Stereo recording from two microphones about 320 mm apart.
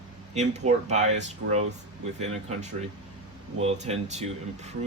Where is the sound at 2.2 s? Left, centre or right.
Centre.